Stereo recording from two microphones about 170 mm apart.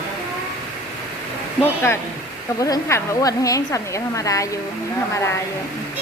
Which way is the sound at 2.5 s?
20° left (ahead or behind).